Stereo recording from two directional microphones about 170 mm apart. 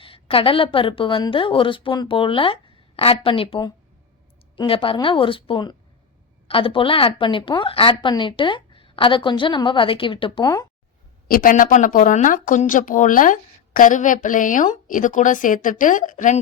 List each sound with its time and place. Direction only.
0.0 s a woman's voice: 30° left (ahead or behind)
11.3 s speech: 55° left (ahead or behind)